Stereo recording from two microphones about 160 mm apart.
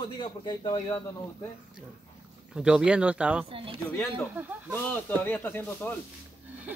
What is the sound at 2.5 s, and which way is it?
Speech, 5° right (ahead or behind).